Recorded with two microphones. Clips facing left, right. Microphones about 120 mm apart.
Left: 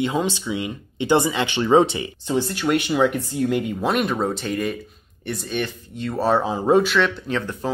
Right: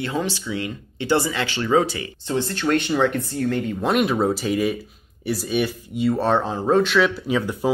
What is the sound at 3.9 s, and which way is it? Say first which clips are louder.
Speech: right 3 dB; centre (ahead or behind).